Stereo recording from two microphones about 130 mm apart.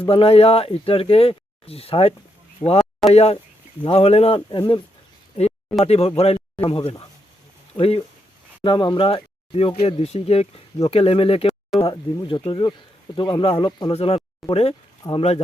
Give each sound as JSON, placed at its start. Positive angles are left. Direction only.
{"t": 0.0, "sound": "speech", "side_deg": 45}
{"t": 4.4, "sound": "speech", "side_deg": 35}
{"t": 5.8, "sound": "speech", "side_deg": 50}
{"t": 8.6, "sound": "speech", "side_deg": 40}
{"t": 11.9, "sound": "speech", "side_deg": 40}
{"t": 13.9, "sound": "speech", "side_deg": 50}